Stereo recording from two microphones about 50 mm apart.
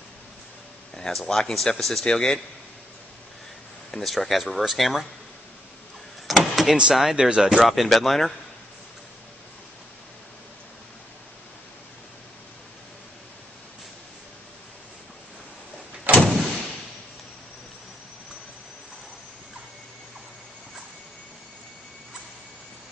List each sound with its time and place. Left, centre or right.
0.9 s speech: centre
3.9 s speech: centre
6.2 s vehicle: centre
6.9 s speech: centre
7.2 s speech: centre
7.5 s speech: centre
16.1 s door: right